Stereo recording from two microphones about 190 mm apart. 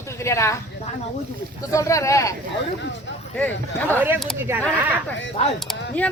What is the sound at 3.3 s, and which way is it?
Speech, 10° left (ahead or behind).